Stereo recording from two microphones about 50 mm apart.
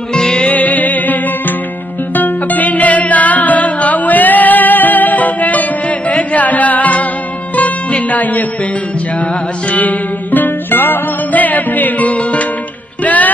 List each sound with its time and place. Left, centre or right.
0.1 s music: centre
0.5 s music: left
9.7 s music: left